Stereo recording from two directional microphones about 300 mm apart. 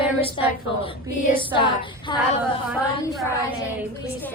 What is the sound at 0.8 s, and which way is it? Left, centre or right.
Speech, left.